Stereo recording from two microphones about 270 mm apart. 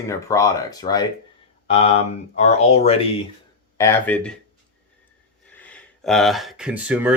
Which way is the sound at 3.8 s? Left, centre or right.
Centre.